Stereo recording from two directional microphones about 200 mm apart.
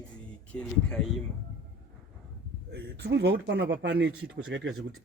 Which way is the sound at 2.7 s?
60° right (ahead or behind).